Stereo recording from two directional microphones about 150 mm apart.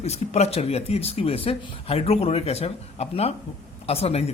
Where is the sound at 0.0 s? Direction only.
45° left (ahead or behind).